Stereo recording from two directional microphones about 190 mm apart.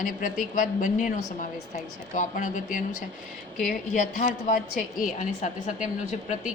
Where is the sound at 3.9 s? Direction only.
40° left (ahead or behind).